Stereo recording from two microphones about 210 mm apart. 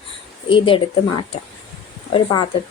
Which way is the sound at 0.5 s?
25° left (ahead or behind).